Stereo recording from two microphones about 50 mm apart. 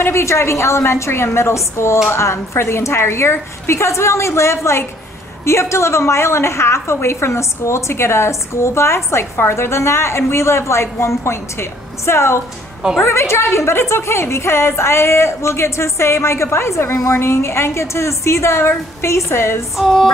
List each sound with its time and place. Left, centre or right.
0.0 s a woman's voice: left
17.1 s a woman's voice: left